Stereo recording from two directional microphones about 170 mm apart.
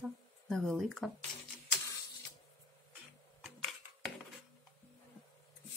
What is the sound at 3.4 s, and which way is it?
Typing, centre (ahead or behind).